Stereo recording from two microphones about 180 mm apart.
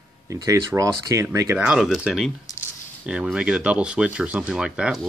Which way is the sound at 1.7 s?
Centre (ahead or behind).